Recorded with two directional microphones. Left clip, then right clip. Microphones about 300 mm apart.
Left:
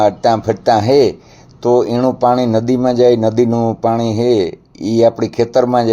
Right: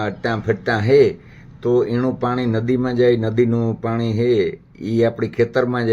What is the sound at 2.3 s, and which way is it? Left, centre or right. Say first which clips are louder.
Speech: left 8 dB; left.